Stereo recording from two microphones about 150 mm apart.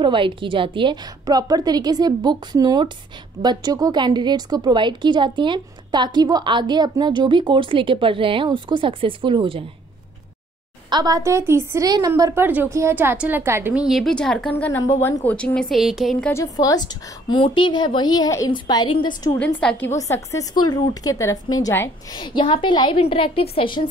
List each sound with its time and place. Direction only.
0.0 s a woman's voice: 35° right (ahead or behind)
10.9 s a woman's voice: 25° right (ahead or behind)
13.8 s speech: centre (ahead or behind)
14.6 s a woman's voice: 20° left (ahead or behind); by 16.3 s centre (ahead or behind)
16.3 s a woman's voice: 20° left (ahead or behind)
19.3 s a woman's voice: 5° left (ahead or behind)
20.0 s a woman's voice: 20° left (ahead or behind)
22.2 s a woman's voice: 35° left (ahead or behind)